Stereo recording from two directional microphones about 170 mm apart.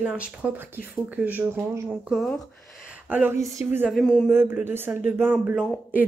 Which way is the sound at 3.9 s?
Centre (ahead or behind).